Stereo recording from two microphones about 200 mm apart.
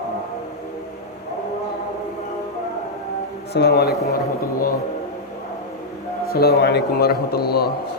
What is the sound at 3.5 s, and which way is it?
Speech, 55° left (ahead or behind).